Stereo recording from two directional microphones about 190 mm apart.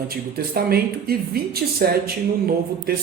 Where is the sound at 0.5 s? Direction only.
55° right (ahead or behind).